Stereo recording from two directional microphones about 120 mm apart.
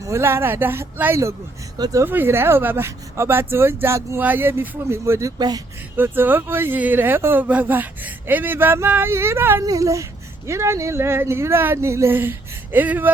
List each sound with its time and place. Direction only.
0.0 s speech: 25° right (ahead or behind)
2.0 s speech: 15° right (ahead or behind)
5.4 s speech: 35° right (ahead or behind)
6.0 s speech: 15° right (ahead or behind)